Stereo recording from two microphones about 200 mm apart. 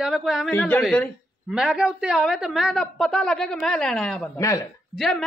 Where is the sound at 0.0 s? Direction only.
Centre (ahead or behind).